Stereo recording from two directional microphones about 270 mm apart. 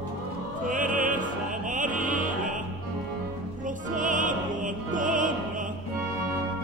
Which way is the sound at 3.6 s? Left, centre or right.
Right.